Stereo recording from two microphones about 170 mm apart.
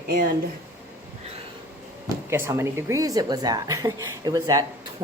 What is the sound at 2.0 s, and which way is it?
A woman's voice, 15° right (ahead or behind).